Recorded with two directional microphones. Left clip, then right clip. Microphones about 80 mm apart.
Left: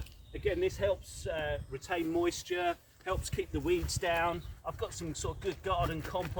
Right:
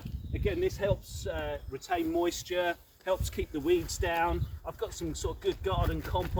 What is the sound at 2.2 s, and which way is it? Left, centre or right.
Speech, centre.